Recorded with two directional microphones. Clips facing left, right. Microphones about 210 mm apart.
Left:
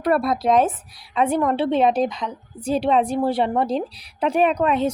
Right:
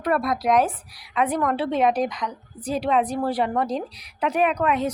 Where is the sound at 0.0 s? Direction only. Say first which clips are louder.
Left 3 dB; 30° left (ahead or behind).